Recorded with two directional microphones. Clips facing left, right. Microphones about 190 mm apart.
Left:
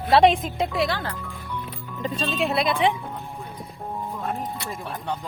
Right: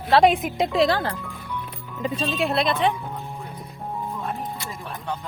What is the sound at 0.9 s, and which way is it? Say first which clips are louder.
Speech: right 5 dB; 35° right (ahead or behind).